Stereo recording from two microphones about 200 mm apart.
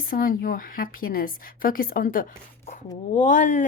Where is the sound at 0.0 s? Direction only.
45° left (ahead or behind).